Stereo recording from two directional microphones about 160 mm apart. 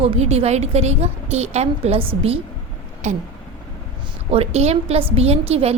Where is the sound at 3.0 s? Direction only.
45° right (ahead or behind).